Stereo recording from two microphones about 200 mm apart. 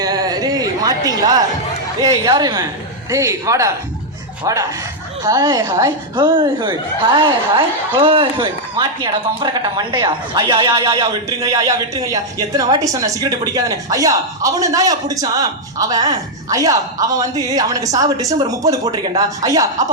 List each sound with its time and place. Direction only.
0.0 s a man's voice: 20° right (ahead or behind)